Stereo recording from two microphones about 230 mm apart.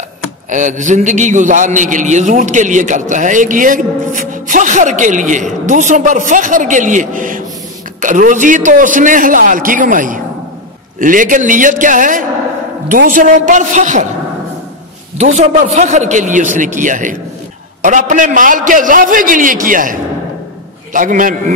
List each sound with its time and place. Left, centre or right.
0.5 s a man's voice: right
15.1 s a man's voice: right